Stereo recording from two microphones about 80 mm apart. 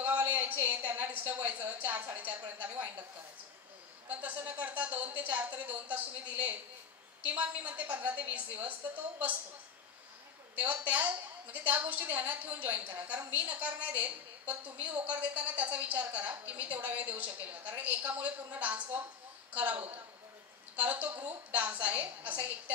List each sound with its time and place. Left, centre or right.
0.0 s a woman's voice: right
4.1 s a woman's voice: centre
10.5 s a woman's voice: centre